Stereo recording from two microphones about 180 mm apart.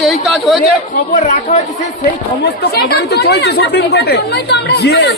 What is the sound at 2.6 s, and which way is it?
Speech, 60° left (ahead or behind).